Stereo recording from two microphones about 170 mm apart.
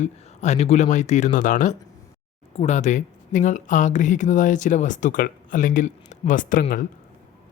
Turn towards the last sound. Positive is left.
turn(degrees=55)  # may be behind; listen again after turning